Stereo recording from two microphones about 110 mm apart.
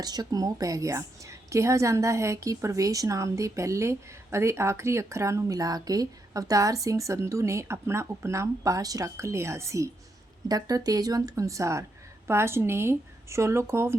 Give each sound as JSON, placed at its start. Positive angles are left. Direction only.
{"t": 0.0, "sound": "a woman's voice", "side_deg": -35}